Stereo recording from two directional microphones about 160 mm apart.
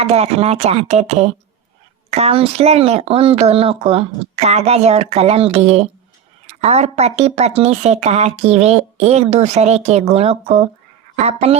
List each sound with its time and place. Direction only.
0.0 s speech: 40° right (ahead or behind)